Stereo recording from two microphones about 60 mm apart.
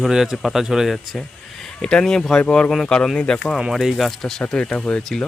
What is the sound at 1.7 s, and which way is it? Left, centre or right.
Speech, centre.